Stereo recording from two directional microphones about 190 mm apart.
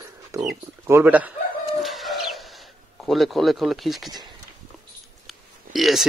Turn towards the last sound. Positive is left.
turn(degrees=0)  # may be behind; listen again after turning